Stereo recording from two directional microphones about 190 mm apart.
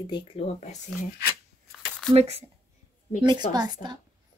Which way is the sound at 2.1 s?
35° right (ahead or behind).